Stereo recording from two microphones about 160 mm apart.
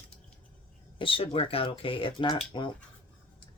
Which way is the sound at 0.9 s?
35° left (ahead or behind).